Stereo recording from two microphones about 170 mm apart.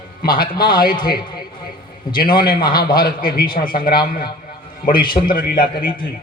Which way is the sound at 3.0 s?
60° left (ahead or behind).